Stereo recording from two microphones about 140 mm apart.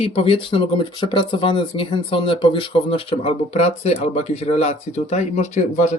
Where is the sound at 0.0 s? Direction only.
45° left (ahead or behind).